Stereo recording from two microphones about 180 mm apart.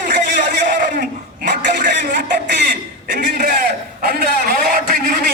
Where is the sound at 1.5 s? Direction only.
70° right (ahead or behind).